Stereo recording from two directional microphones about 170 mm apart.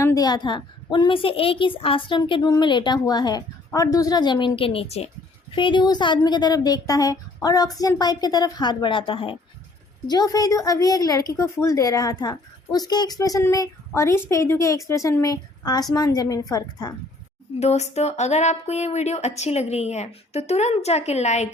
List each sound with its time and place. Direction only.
0.0 s a woman's voice: 20° left (ahead or behind)
17.6 s speech: 40° left (ahead or behind)